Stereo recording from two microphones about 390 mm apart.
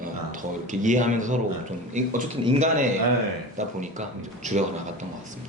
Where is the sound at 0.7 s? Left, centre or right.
Centre.